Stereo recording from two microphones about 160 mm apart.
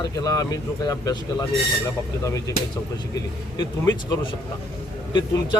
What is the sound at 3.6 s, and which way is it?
A man's voice, 25° left (ahead or behind).